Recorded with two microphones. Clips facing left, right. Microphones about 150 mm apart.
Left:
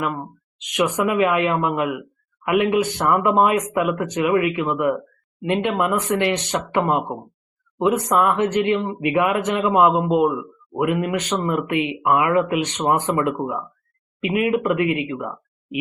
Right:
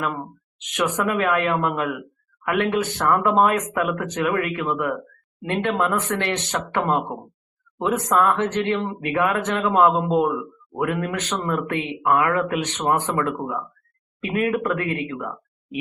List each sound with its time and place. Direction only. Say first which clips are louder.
0.0 s speech: left 2 dB; 5° left (ahead or behind)
5.8 s speech: left 3 dB; 15° left (ahead or behind)